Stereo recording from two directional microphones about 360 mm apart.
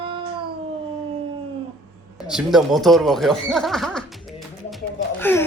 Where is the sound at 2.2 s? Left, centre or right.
Centre.